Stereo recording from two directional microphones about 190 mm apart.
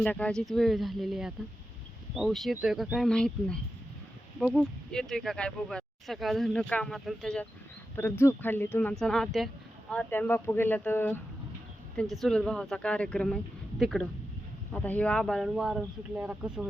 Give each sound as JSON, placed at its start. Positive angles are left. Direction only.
{"t": 0.0, "sound": "speech", "side_deg": 5}
{"t": 12.2, "sound": "speech", "side_deg": 5}